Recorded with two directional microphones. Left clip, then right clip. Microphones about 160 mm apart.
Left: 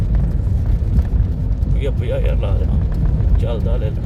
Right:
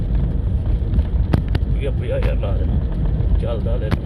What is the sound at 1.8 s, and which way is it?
Speech, 30° left (ahead or behind).